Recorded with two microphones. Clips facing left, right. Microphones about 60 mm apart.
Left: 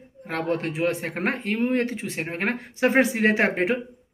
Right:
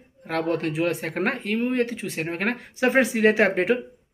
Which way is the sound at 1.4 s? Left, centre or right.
Left.